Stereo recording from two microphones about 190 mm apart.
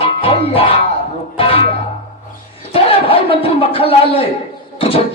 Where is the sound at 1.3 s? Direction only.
30° left (ahead or behind).